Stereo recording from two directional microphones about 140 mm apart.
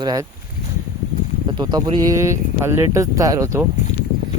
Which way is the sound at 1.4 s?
30° right (ahead or behind).